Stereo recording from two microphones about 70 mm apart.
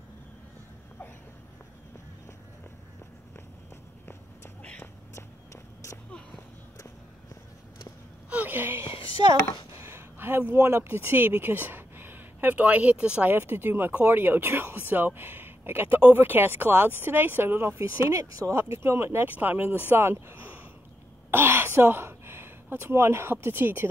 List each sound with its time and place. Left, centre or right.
5.1 s walk: left
8.3 s a sound: right
9.8 s speech: right; by 13.3 s centre
13.3 s speech: right
19.9 s speech: right